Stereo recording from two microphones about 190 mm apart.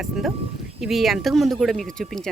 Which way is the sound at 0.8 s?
Centre (ahead or behind).